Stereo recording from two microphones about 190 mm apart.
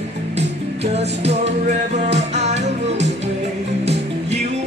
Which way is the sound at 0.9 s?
35° right (ahead or behind).